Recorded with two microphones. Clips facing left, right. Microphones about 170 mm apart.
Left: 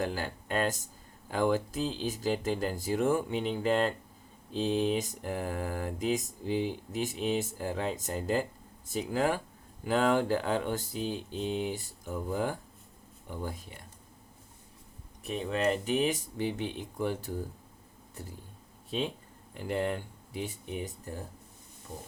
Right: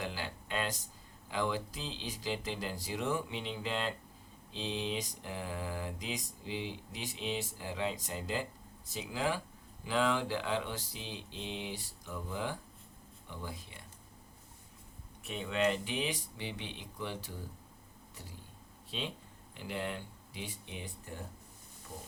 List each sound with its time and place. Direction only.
0.0 s speech: 50° left (ahead or behind)
1.3 s mantra: 50° left (ahead or behind)
13.2 s speech: 45° left (ahead or behind)
15.2 s mantra: 40° left (ahead or behind)
18.1 s speech: 50° left (ahead or behind)
19.5 s mantra: 50° left (ahead or behind)